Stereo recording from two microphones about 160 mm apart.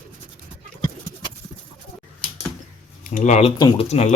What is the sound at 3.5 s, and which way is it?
Speech, 25° left (ahead or behind).